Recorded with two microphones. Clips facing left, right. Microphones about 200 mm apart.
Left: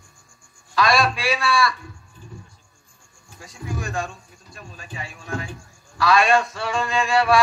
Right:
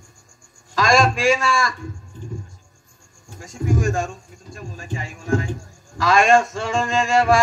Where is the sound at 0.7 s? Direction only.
45° right (ahead or behind).